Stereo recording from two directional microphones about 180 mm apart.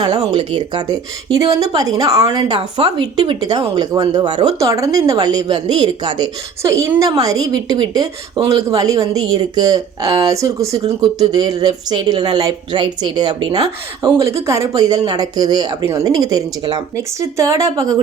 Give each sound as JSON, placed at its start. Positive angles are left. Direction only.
{"t": 0.3, "sound": "speech", "side_deg": -25}